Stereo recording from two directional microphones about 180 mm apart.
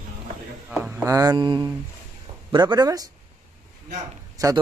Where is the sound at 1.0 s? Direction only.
20° right (ahead or behind).